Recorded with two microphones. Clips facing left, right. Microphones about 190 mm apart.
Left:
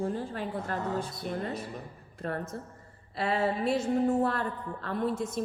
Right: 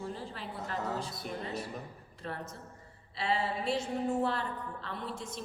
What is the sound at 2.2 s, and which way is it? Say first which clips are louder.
A woman's voice: left 7 dB; 50° left (ahead or behind).